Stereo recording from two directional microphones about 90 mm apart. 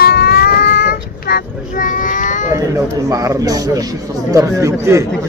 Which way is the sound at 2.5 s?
40° right (ahead or behind).